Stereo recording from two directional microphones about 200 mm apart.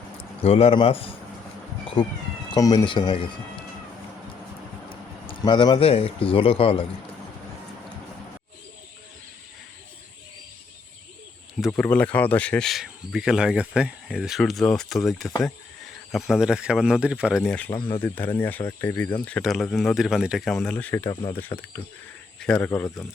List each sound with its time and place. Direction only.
0.4 s speech: 30° left (ahead or behind)
2.5 s speech: 20° left (ahead or behind)
4.9 s a man's voice: 25° left (ahead or behind)
11.6 s speech: 5° left (ahead or behind)
17.7 s speech: 25° left (ahead or behind)
18.0 s speech: 10° left (ahead or behind)